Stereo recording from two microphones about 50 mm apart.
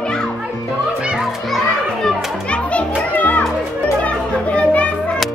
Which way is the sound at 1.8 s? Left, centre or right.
Centre.